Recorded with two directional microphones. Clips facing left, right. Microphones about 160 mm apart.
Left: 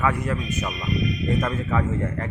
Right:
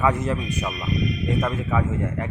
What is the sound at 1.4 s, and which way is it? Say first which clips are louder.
Speech: even; 10° right (ahead or behind).